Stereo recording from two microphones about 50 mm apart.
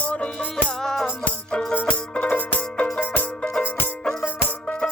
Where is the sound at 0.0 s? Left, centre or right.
Left.